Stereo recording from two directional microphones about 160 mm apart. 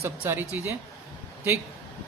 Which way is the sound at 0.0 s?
15° right (ahead or behind).